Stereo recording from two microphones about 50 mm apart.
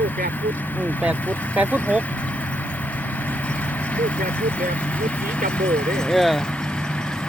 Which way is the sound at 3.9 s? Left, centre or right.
Left.